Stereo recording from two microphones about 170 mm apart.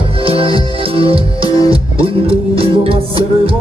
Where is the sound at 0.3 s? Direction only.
30° right (ahead or behind).